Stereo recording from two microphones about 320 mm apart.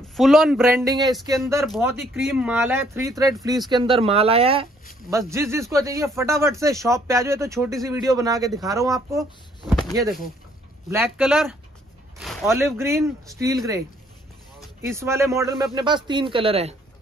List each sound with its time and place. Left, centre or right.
0.1 s speech: centre